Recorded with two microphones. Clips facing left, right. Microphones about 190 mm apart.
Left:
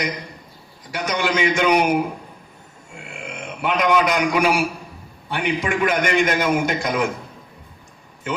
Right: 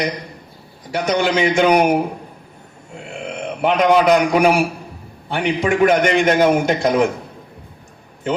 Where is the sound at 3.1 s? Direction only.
35° right (ahead or behind).